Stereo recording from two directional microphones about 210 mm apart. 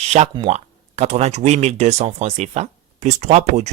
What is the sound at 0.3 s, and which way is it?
Speech, 30° right (ahead or behind).